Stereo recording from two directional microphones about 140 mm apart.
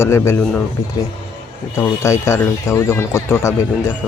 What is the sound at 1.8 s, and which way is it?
Speech, 20° left (ahead or behind).